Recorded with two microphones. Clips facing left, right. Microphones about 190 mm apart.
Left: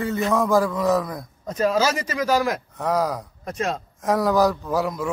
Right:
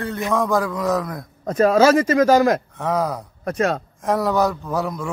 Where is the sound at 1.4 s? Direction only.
55° right (ahead or behind).